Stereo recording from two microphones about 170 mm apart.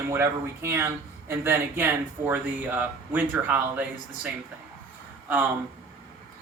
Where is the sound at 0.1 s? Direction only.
15° right (ahead or behind).